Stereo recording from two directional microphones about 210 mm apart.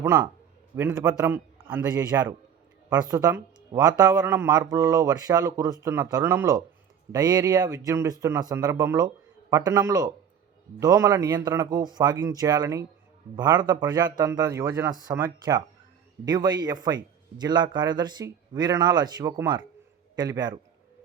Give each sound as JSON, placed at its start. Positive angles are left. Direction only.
{"t": 0.0, "sound": "speech", "side_deg": -10}
{"t": 2.9, "sound": "speech", "side_deg": -20}